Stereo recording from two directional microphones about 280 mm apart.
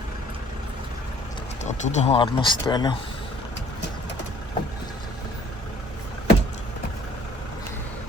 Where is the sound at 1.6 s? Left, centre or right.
Left.